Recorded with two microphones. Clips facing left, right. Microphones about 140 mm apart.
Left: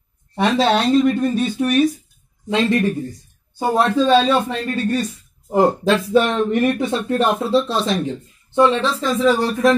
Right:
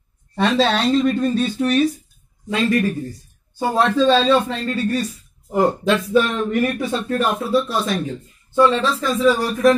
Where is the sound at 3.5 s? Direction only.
15° left (ahead or behind).